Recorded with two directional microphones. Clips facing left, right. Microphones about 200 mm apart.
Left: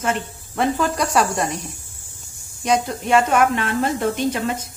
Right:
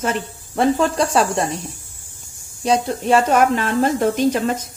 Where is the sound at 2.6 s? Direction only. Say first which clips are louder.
Right 2 dB; 35° right (ahead or behind).